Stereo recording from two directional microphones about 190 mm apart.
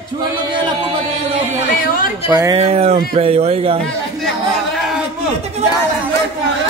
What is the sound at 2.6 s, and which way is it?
Speech, 35° right (ahead or behind).